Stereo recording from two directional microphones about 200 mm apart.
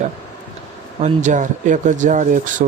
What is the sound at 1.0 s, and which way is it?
Speech, 40° right (ahead or behind).